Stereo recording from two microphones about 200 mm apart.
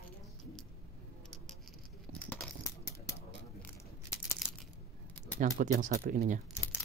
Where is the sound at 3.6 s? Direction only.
15° left (ahead or behind).